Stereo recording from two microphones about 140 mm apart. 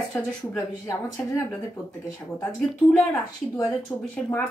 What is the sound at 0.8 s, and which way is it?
Speech, 20° left (ahead or behind).